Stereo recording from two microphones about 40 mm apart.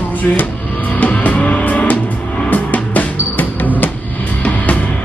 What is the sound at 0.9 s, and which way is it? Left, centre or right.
Music, left.